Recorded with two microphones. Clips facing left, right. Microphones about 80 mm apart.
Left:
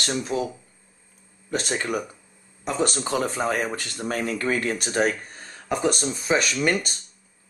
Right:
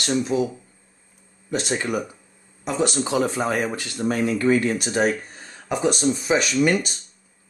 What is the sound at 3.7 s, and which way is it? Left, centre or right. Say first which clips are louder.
Speech: right 4 dB; left.